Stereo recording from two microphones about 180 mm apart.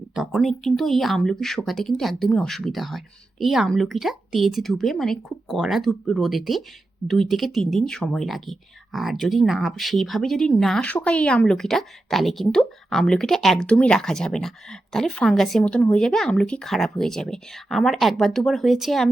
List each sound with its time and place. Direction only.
0.1 s speech: 5° right (ahead or behind)